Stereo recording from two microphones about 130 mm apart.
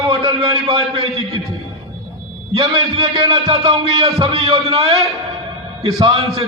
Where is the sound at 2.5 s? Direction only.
40° right (ahead or behind).